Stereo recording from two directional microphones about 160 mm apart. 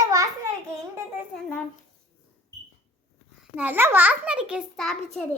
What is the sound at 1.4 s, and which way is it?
Speech, 10° left (ahead or behind).